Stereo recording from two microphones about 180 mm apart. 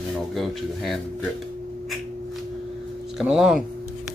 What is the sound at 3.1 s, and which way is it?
Speech, centre (ahead or behind).